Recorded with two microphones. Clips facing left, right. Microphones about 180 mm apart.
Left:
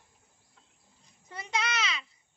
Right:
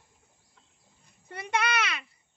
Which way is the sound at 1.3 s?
60° right (ahead or behind).